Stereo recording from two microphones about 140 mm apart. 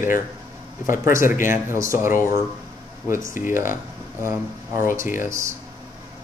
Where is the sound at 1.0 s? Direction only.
20° right (ahead or behind).